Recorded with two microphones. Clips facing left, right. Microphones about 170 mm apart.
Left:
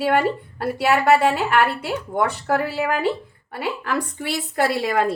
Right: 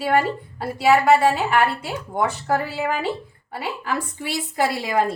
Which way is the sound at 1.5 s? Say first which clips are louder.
Left 1 dB; 60° left (ahead or behind).